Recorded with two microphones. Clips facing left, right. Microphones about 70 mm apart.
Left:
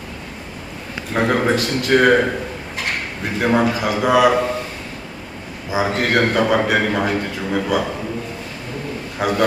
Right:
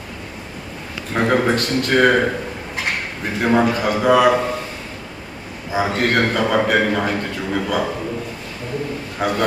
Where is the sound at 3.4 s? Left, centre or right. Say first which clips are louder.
Right 1 dB; centre.